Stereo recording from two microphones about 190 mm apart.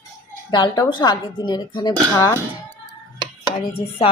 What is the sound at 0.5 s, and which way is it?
A woman's voice, 25° left (ahead or behind).